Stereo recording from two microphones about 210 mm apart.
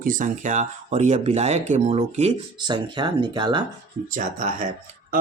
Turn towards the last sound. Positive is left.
turn(degrees=-40)  # may be behind; listen again after turning